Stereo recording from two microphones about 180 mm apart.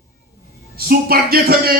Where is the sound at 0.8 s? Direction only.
55° right (ahead or behind).